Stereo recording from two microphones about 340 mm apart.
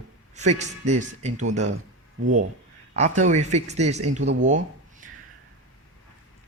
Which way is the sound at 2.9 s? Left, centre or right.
Right.